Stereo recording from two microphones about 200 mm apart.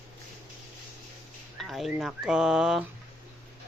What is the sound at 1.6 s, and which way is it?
Speech, centre (ahead or behind).